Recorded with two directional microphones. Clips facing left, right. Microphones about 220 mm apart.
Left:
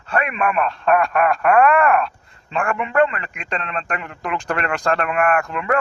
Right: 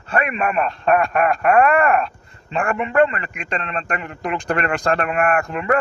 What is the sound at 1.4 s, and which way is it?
Speech, 25° right (ahead or behind).